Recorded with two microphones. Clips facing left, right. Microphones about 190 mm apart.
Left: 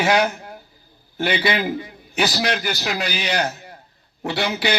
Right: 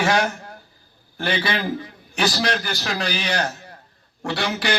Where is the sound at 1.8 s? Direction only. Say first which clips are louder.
Left 1 dB; 15° left (ahead or behind).